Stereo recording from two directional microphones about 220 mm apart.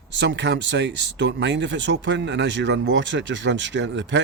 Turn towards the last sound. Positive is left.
turn(degrees=-55)  # may be behind; listen again after turning